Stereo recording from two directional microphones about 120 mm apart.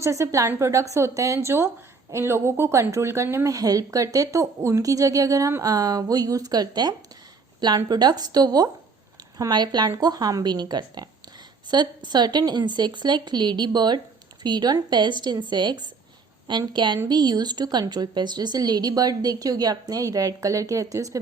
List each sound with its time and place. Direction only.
0.0 s a woman's voice: 25° right (ahead or behind)